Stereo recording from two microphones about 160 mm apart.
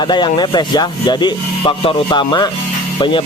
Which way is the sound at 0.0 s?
30° left (ahead or behind).